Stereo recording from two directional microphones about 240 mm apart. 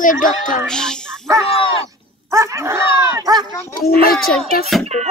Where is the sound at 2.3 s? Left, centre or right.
Centre.